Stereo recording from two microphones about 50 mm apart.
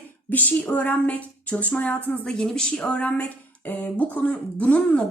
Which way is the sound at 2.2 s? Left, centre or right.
Centre.